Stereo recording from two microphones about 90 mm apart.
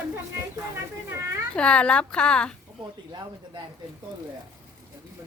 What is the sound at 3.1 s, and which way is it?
Speech, 55° right (ahead or behind).